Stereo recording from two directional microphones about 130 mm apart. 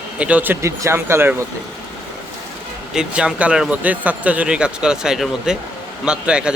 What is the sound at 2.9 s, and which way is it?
Speech, 5° right (ahead or behind).